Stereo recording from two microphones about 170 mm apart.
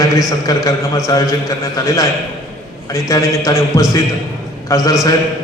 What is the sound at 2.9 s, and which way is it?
A man's voice, 20° left (ahead or behind).